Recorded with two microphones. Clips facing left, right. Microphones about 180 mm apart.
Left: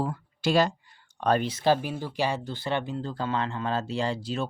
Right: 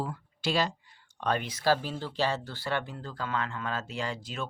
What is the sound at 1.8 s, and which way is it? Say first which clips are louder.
Speech: left 2 dB; 15° left (ahead or behind).